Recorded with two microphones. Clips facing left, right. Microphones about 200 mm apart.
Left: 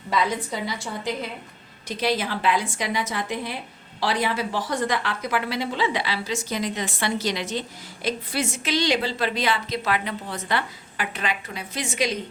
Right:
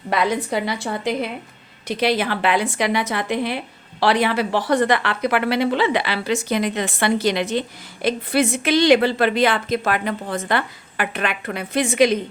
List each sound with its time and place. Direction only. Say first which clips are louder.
0.1 s a woman's voice: right 4 dB; 65° right (ahead or behind)